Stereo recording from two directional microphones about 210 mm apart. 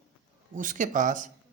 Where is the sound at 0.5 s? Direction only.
40° right (ahead or behind).